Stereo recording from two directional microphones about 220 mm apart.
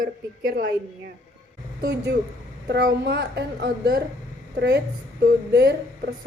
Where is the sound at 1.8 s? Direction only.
50° right (ahead or behind).